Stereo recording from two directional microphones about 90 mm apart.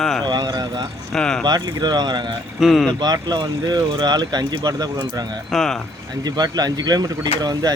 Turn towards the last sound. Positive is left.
turn(degrees=-45)  # may be behind; listen again after turning